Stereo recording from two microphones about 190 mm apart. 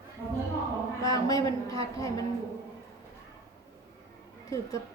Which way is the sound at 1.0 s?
20° left (ahead or behind).